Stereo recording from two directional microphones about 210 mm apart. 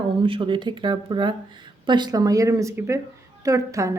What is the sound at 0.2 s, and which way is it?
A woman's voice, 25° right (ahead or behind).